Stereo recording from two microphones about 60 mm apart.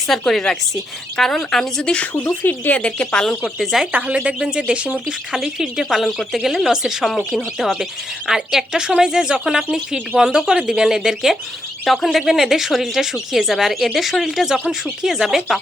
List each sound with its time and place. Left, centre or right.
0.1 s speech: centre
2.4 s speech: left
2.8 s speech: centre
3.6 s speech: centre
3.9 s speech: centre